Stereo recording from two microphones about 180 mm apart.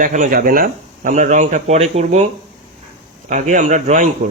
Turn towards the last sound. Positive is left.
turn(degrees=-45)  # may be behind; listen again after turning